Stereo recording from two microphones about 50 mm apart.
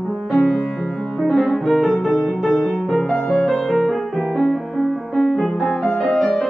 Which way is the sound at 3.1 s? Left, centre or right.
Left.